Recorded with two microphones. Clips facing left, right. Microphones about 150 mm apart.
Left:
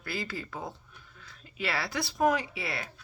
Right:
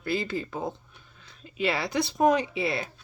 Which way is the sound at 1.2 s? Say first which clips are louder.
Right 7 dB; 20° right (ahead or behind).